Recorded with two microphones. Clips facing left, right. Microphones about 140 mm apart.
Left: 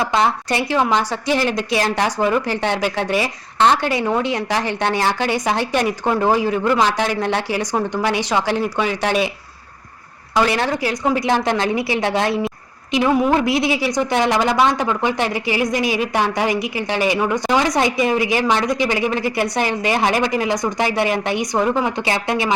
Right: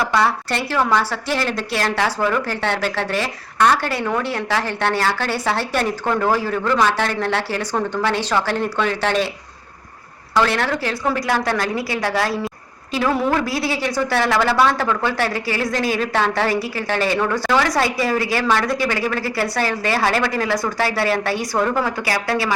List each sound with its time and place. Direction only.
0.0 s a woman's voice: 20° left (ahead or behind)
10.3 s a woman's voice: 15° left (ahead or behind)